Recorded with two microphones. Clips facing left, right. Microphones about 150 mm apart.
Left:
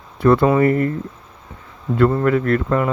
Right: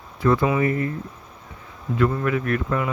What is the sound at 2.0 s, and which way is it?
Speech, 50° left (ahead or behind).